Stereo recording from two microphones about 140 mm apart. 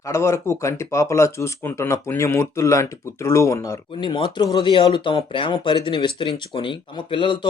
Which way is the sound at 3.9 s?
35° left (ahead or behind).